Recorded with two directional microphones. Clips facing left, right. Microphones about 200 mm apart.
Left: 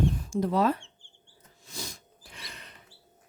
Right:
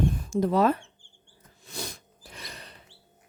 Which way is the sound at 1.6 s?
60° right (ahead or behind).